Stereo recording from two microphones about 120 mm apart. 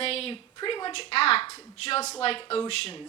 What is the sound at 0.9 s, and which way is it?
A woman's voice, 55° left (ahead or behind).